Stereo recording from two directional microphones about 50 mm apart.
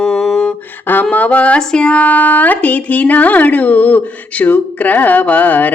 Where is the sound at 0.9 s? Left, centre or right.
Left.